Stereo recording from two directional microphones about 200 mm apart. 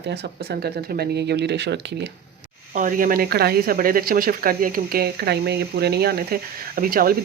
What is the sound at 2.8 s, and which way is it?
Speech, 40° right (ahead or behind).